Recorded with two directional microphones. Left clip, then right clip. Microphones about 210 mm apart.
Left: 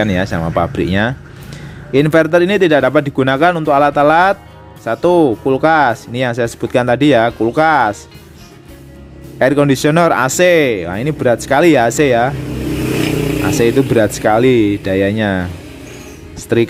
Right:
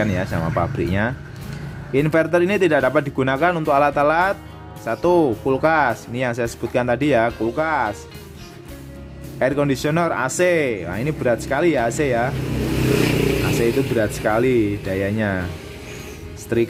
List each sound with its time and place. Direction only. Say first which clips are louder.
0.0 s speech: left 6 dB; 30° left (ahead or behind)
9.4 s speech: left 8 dB; 25° left (ahead or behind)
13.4 s speech: left 7 dB; 25° left (ahead or behind)
16.5 s speech: left 7 dB; 30° left (ahead or behind)